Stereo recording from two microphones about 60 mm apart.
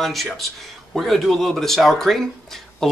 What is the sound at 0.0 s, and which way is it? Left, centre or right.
Speech, centre.